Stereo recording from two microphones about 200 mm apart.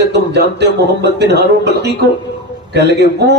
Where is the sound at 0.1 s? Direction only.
55° right (ahead or behind).